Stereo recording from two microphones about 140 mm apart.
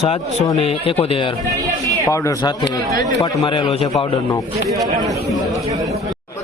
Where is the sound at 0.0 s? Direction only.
45° left (ahead or behind).